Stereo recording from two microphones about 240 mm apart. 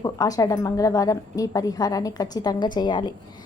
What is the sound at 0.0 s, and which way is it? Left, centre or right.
A woman's voice, centre.